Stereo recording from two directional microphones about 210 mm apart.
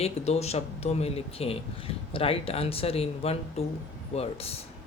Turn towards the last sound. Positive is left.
turn(degrees=30)  # may be behind; listen again after turning